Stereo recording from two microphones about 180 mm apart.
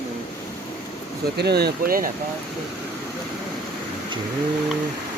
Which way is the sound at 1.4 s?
65° right (ahead or behind).